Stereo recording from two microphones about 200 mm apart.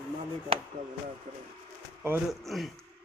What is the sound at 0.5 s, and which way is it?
Speech, 30° right (ahead or behind).